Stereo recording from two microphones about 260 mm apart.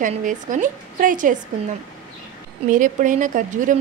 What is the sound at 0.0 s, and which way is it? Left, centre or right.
A woman's voice, right.